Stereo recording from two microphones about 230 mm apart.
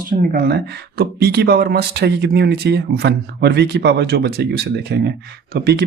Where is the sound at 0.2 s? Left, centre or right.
Right.